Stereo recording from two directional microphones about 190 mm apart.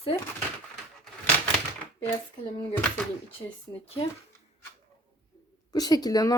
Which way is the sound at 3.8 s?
30° left (ahead or behind).